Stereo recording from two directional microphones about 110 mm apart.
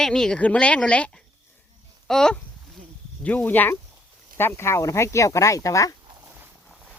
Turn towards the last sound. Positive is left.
turn(degrees=30)  # may be behind; listen again after turning